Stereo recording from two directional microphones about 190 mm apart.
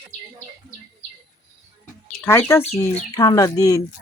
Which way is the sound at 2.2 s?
10° left (ahead or behind).